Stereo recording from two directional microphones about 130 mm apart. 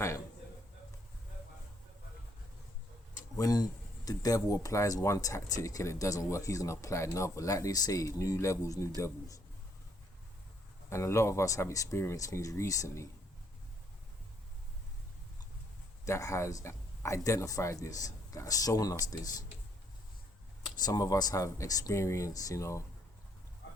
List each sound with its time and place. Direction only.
3.3 s speech: 25° left (ahead or behind)
10.8 s speech: 20° left (ahead or behind)
16.0 s speech: 25° left (ahead or behind)
20.7 s speech: 30° left (ahead or behind)